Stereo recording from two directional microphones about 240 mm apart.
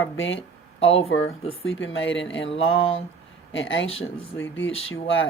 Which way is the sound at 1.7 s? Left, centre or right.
Left.